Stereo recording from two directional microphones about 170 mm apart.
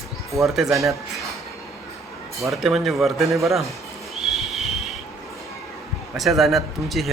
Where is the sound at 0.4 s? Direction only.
Centre (ahead or behind).